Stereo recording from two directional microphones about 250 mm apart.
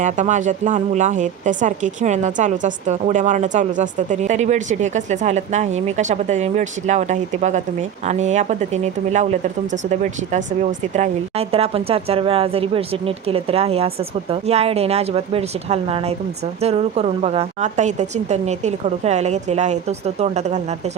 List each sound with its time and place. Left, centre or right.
0.0 s speech: right